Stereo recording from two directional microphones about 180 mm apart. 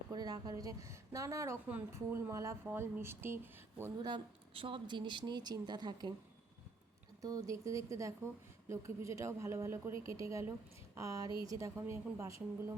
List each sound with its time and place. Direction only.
0.1 s a woman's voice: 20° right (ahead or behind)
4.1 s speech: 30° right (ahead or behind)
7.2 s a woman's voice: 20° right (ahead or behind)